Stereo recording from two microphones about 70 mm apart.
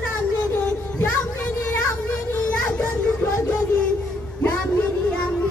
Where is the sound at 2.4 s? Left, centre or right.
Centre.